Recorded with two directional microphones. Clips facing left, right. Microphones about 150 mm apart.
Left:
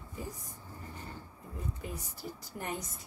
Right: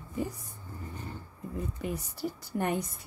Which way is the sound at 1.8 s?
65° right (ahead or behind).